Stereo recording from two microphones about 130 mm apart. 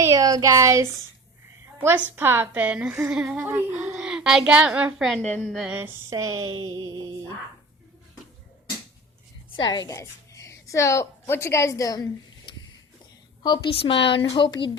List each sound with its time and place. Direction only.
0.0 s a child's voice: 25° right (ahead or behind); by 5.2 s centre (ahead or behind)
5.2 s a woman's voice: 10° left (ahead or behind)
5.7 s speech: 20° right (ahead or behind)
9.6 s a woman's voice: 35° left (ahead or behind)
9.9 s a woman's voice: 25° left (ahead or behind)
13.4 s a woman's voice: 35° left (ahead or behind)